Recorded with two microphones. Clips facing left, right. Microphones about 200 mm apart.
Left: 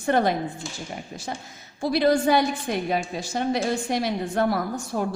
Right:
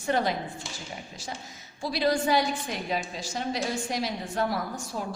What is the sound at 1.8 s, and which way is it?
A woman's voice, 55° left (ahead or behind).